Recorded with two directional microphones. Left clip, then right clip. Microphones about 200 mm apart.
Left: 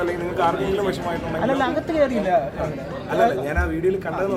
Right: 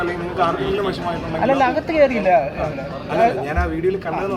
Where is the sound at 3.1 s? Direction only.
15° left (ahead or behind).